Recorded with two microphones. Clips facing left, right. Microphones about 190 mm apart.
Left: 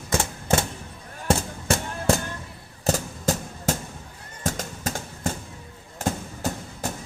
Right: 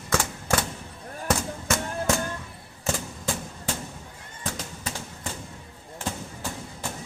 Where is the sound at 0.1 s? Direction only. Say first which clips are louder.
Left 2 dB; 25° left (ahead or behind).